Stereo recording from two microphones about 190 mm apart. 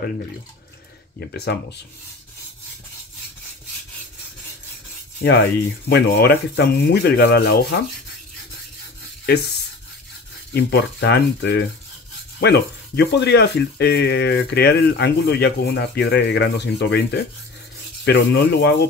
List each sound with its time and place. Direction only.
1.3 s speech: 60° left (ahead or behind)
5.9 s speech: 60° left (ahead or behind)
9.2 s speech: 60° left (ahead or behind)
10.5 s speech: 60° left (ahead or behind)